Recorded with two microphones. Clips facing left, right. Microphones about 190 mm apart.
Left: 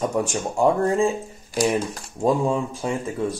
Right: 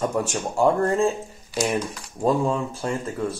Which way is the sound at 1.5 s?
45° left (ahead or behind).